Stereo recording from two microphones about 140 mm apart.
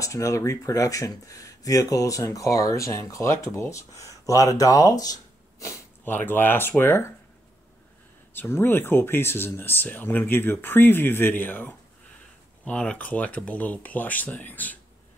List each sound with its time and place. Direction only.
0.0 s speech: 20° left (ahead or behind)
8.3 s speech: 15° left (ahead or behind)